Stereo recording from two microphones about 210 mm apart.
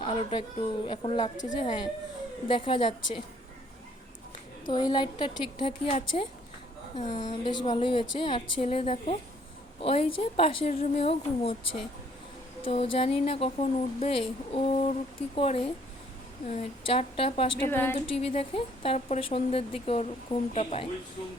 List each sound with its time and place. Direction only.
0.0 s a woman's voice: 25° left (ahead or behind)
4.7 s a woman's voice: 20° left (ahead or behind)
17.7 s a woman's voice: 10° left (ahead or behind)
18.0 s a woman's voice: 25° left (ahead or behind)